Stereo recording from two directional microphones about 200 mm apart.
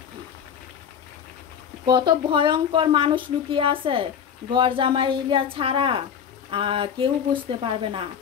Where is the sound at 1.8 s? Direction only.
25° right (ahead or behind).